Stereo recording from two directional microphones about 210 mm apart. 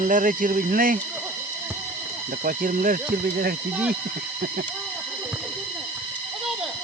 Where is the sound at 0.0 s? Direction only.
40° right (ahead or behind).